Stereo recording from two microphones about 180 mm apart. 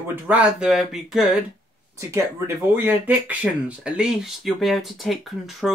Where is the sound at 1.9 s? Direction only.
15° right (ahead or behind); by 5.7 s centre (ahead or behind).